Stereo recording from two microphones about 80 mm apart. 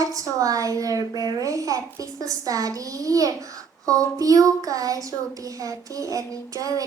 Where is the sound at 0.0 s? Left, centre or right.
Right.